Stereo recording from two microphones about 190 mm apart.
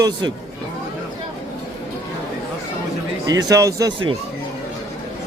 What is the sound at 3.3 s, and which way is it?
Speech, 20° right (ahead or behind).